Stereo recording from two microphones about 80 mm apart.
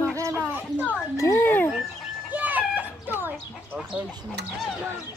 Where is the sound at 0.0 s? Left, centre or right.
Right.